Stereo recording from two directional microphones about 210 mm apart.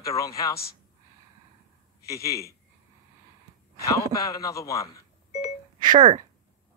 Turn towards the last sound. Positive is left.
turn(degrees=-20)  # may be behind; listen again after turning